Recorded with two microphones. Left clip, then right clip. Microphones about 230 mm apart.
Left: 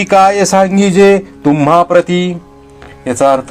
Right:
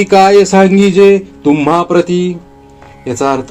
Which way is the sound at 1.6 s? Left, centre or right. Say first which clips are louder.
Left 5 dB; left.